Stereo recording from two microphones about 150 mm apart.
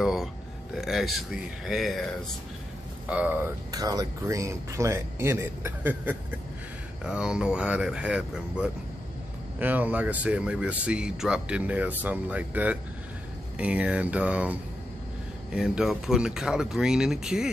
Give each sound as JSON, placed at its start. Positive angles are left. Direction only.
{"t": 0.0, "sound": "a sound", "side_deg": 0}
{"t": 0.7, "sound": "speech", "side_deg": 0}
{"t": 3.1, "sound": "speech", "side_deg": -10}
{"t": 3.7, "sound": "speech", "side_deg": -25}